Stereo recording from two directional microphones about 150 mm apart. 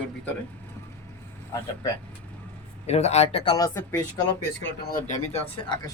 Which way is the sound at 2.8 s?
45° left (ahead or behind).